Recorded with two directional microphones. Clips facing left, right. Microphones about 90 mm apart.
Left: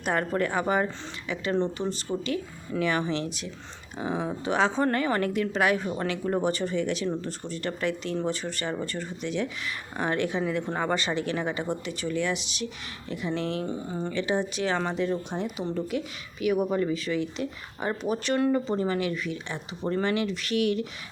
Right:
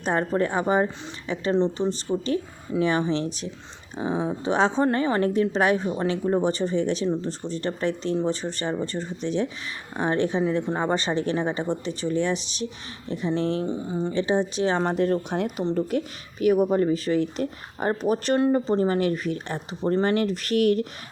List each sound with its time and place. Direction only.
0.0 s a woman's voice: 30° right (ahead or behind)
2.2 s speech: 30° right (ahead or behind)
3.9 s a woman's voice: 20° right (ahead or behind)
4.4 s a woman's voice: 30° right (ahead or behind)
6.1 s a woman's voice: 25° right (ahead or behind)
10.9 s speech: 35° right (ahead or behind)
13.7 s speech: 15° right (ahead or behind)
14.1 s speech: 30° right (ahead or behind)
14.8 s speech: 50° right (ahead or behind)
15.7 s speech: 45° right (ahead or behind)